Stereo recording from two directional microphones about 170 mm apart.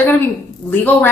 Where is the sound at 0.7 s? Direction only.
10° left (ahead or behind).